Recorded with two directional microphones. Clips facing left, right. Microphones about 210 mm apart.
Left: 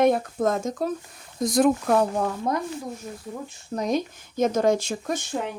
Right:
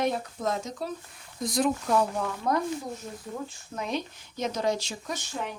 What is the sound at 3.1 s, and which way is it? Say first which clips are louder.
Speech: left 3 dB; 5° left (ahead or behind).